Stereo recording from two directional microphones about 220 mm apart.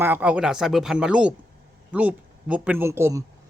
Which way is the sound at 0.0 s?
10° right (ahead or behind).